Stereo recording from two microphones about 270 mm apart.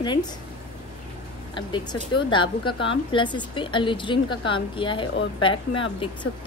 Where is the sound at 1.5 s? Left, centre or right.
Centre.